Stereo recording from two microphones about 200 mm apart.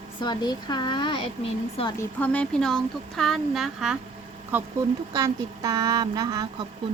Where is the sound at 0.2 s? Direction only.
20° left (ahead or behind).